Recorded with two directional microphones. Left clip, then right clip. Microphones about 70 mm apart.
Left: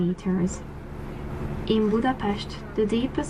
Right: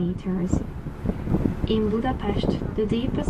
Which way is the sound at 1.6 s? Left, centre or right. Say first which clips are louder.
Left 3 dB; left.